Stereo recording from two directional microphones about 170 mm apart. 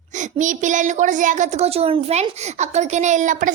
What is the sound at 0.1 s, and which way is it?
Speech, 45° right (ahead or behind).